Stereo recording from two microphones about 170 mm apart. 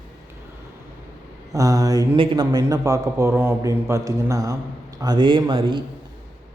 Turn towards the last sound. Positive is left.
turn(degrees=-30)  # may be behind; listen again after turning